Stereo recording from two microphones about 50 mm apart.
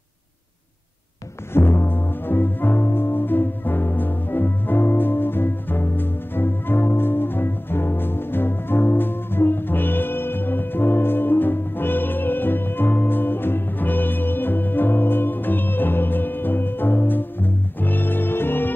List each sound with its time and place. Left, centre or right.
1.5 s music: left